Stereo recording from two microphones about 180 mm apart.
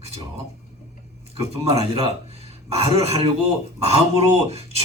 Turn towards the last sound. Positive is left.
turn(degrees=-35)  # may be behind; listen again after turning